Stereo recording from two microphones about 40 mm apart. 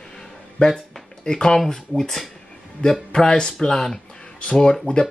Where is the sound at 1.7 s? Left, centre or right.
Centre.